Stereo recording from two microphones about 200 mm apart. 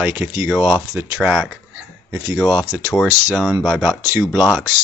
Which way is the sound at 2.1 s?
15° right (ahead or behind).